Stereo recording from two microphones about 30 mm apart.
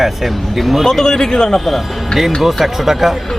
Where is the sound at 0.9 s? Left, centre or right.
Centre.